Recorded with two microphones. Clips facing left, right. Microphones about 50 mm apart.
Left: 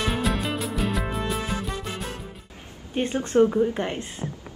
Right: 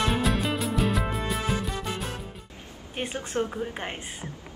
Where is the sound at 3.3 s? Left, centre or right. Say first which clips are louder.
Left 11 dB; centre.